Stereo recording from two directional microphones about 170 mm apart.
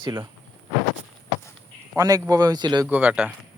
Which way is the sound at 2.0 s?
20° right (ahead or behind).